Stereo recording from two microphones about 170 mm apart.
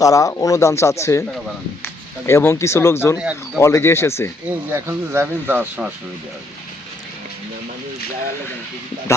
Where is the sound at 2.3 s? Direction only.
15° left (ahead or behind).